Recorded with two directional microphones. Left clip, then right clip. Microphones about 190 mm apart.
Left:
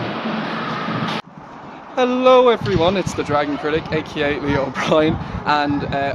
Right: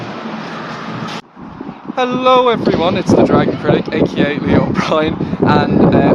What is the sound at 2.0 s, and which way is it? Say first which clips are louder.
Speech: right 1 dB; 15° right (ahead or behind).